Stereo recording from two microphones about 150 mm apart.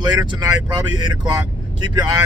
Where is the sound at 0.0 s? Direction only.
30° right (ahead or behind).